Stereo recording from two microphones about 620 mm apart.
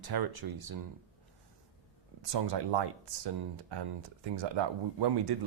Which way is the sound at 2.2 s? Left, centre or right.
Right.